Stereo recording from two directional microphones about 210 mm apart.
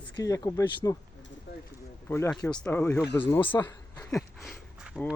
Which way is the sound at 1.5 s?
50° left (ahead or behind).